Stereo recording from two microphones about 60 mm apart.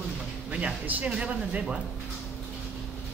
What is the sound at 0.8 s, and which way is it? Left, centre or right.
Speech, right.